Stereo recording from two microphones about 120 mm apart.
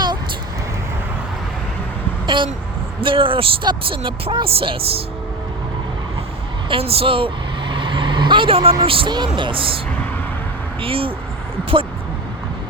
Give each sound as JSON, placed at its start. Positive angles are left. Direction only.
{"t": 2.2, "sound": "speech", "side_deg": -40}
{"t": 6.7, "sound": "speech", "side_deg": -50}
{"t": 7.7, "sound": "vehicle", "side_deg": -45}
{"t": 8.8, "sound": "speech", "side_deg": -50}